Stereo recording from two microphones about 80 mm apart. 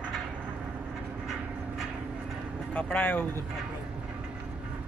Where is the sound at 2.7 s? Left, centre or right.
Centre.